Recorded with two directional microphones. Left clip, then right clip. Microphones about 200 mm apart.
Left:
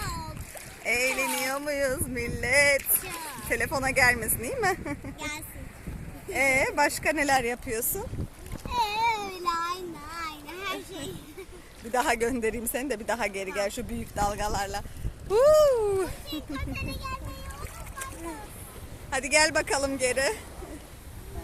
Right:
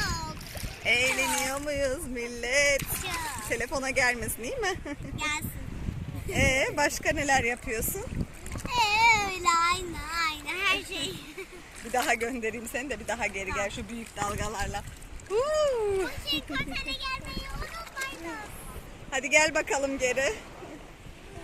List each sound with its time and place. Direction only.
0.0 s splash: centre (ahead or behind)
0.9 s a sound: centre (ahead or behind)
2.4 s speech: centre (ahead or behind)
8.7 s a sound: 5° left (ahead or behind)
11.9 s speech: 10° left (ahead or behind)
19.1 s speech: 5° left (ahead or behind)